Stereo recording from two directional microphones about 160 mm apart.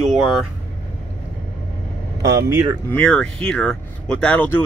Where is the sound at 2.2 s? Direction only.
20° right (ahead or behind).